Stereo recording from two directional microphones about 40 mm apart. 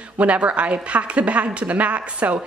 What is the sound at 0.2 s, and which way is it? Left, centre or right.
A woman's voice, right.